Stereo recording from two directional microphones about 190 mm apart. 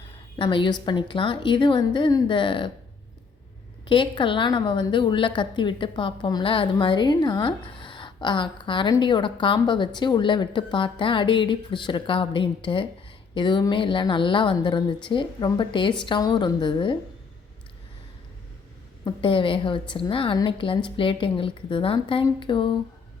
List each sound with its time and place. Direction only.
0.3 s a woman's voice: 25° left (ahead or behind)
3.8 s a woman's voice: 25° left (ahead or behind)
19.0 s a woman's voice: 25° left (ahead or behind)